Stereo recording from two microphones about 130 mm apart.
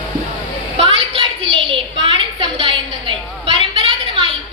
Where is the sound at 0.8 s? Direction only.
45° right (ahead or behind).